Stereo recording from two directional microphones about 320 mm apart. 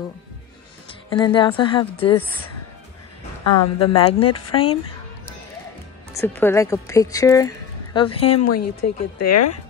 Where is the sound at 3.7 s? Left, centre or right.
Centre.